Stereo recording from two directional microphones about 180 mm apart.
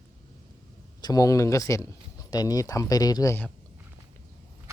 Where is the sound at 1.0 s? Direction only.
20° left (ahead or behind).